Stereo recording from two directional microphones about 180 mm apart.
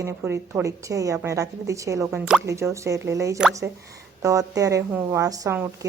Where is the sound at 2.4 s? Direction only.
15° right (ahead or behind).